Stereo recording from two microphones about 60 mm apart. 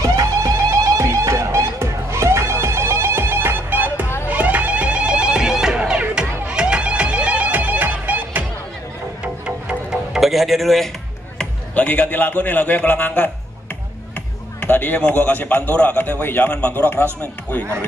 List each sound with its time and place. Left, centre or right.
0.0 s music: right
0.9 s music: right; by 9.9 s centre
10.1 s music: centre
11.7 s a man's voice: left
14.1 s music: left
15.1 s a man's voice: left